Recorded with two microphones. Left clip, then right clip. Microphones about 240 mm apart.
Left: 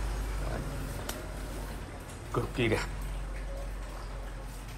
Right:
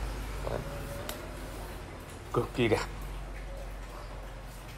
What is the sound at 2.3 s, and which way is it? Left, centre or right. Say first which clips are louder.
Speech: right 2 dB; centre.